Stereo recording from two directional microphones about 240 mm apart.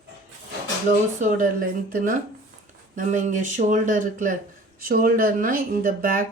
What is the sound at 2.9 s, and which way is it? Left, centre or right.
Speech, right.